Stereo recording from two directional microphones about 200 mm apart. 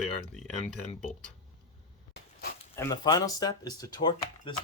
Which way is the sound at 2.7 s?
15° left (ahead or behind).